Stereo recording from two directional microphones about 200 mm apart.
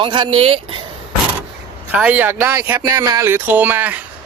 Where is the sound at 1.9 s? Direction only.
5° right (ahead or behind).